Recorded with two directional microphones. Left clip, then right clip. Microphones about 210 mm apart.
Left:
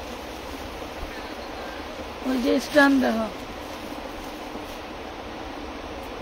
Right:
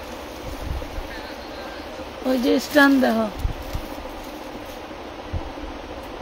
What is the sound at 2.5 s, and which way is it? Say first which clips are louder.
Speech: right 2 dB; 40° right (ahead or behind).